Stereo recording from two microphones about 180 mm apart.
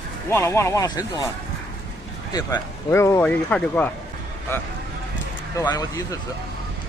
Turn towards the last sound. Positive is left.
turn(degrees=20)  # may be behind; listen again after turning